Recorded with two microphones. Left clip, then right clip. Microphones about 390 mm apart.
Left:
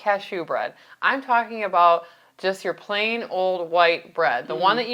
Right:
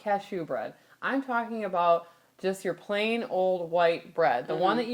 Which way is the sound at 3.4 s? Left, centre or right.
Left.